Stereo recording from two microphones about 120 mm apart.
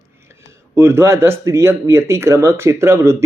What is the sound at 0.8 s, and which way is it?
Speech, 20° right (ahead or behind).